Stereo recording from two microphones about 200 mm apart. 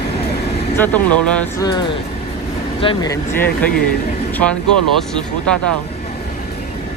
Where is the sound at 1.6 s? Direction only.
20° left (ahead or behind).